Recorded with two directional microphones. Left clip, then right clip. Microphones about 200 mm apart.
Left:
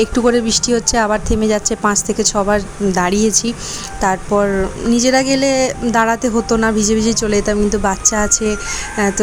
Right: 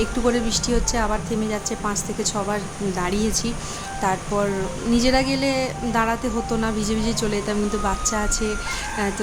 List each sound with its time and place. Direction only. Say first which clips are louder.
0.0 s a woman's voice: left 8 dB; 35° left (ahead or behind)